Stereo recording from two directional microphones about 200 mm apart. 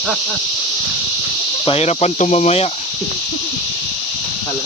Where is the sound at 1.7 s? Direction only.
30° left (ahead or behind).